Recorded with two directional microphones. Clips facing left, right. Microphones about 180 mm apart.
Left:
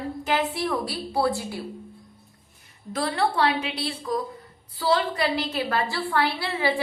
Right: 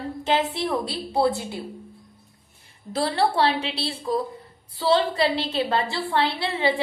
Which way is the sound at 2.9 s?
30° right (ahead or behind).